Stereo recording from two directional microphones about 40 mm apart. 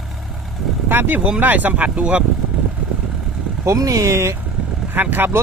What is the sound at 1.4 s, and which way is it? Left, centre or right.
Speech, right.